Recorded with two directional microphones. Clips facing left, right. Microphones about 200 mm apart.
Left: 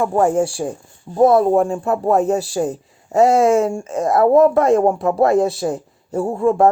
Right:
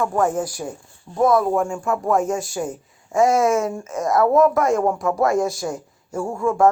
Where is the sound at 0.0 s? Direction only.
30° left (ahead or behind).